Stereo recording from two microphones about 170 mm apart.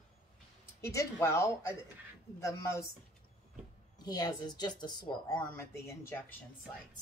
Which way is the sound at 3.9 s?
25° left (ahead or behind).